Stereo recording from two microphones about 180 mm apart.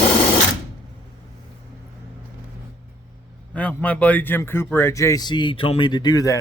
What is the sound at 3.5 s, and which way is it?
A man's voice, 10° left (ahead or behind).